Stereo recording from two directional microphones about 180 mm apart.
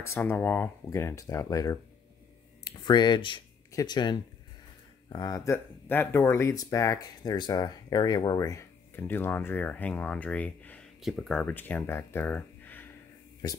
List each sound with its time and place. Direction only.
0.0 s speech: 15° left (ahead or behind)
13.4 s speech: 20° left (ahead or behind)